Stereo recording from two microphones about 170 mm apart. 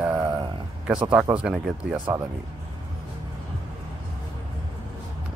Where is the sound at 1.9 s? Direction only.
25° right (ahead or behind).